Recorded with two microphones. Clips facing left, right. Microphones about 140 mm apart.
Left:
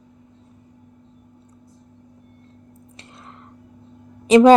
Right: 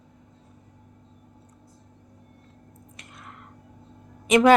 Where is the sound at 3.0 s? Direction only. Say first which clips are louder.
Left 2 dB; 30° left (ahead or behind).